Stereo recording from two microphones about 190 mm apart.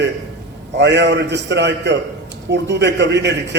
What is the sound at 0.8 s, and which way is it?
A man's voice, 65° right (ahead or behind).